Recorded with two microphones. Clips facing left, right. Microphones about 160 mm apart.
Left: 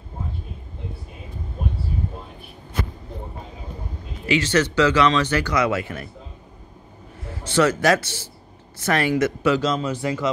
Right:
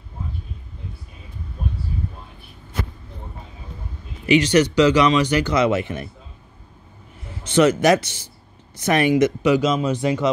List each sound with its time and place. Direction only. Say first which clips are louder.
4.3 s speech: right 4 dB; 15° right (ahead or behind)
7.4 s speech: right 3 dB; 20° right (ahead or behind)